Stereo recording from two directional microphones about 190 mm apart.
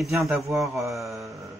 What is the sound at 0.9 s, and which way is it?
Speech, centre (ahead or behind).